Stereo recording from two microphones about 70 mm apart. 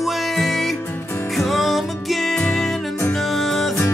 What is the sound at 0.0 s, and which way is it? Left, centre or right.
Music, centre.